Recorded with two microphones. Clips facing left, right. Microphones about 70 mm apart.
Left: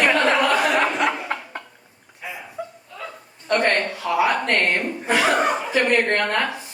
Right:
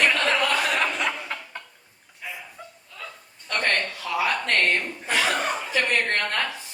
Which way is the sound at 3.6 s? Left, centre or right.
Left.